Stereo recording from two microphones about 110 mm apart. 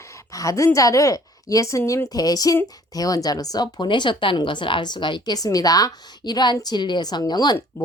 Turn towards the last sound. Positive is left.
turn(degrees=40)  # may be behind; listen again after turning